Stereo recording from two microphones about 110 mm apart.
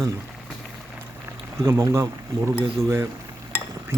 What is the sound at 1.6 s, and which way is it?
Speech, 25° right (ahead or behind).